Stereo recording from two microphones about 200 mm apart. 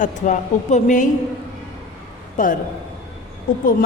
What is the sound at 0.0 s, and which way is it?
A woman's voice, 40° left (ahead or behind).